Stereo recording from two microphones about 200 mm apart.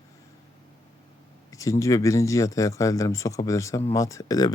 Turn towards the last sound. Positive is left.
turn(degrees=20)  # may be behind; listen again after turning